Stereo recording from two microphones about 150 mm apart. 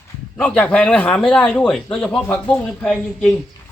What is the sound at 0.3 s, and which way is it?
Speech, 5° left (ahead or behind).